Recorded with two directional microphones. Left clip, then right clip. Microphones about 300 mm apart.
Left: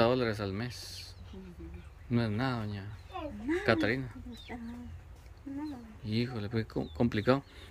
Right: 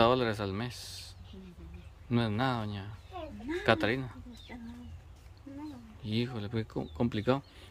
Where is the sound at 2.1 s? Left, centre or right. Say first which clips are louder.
Right 2 dB; centre.